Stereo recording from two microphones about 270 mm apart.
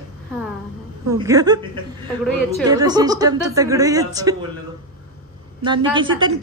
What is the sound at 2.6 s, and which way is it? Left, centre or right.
A woman's voice, centre.